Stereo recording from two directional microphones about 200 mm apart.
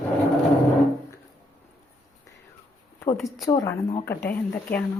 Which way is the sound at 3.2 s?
Centre (ahead or behind).